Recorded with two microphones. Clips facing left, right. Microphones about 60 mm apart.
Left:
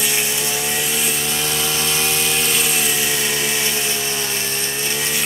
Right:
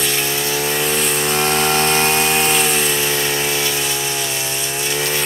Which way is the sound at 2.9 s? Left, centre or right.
Right.